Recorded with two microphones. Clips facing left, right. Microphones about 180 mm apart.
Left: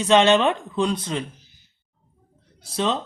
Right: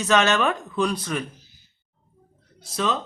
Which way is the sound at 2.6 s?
30° left (ahead or behind).